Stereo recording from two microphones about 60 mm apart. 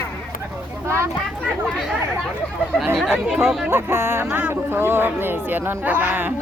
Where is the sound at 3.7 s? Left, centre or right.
Right.